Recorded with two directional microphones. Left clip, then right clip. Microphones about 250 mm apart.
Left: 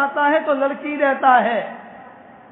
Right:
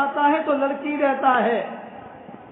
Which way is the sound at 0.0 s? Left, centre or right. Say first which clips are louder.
Left 2 dB; left.